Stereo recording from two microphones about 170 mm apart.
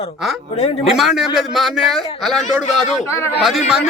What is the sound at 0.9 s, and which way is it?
A man's voice, centre (ahead or behind).